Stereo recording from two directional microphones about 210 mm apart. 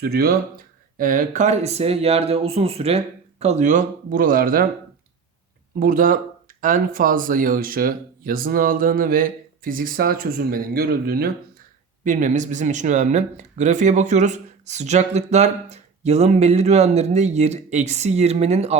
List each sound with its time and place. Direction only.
0.0 s speech: 45° right (ahead or behind)
5.8 s speech: 40° right (ahead or behind)